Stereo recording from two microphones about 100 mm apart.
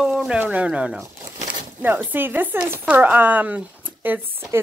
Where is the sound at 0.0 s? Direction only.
5° right (ahead or behind).